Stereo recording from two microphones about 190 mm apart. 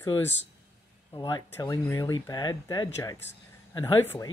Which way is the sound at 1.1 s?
20° left (ahead or behind).